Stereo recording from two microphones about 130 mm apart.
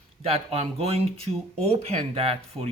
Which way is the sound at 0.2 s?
50° right (ahead or behind).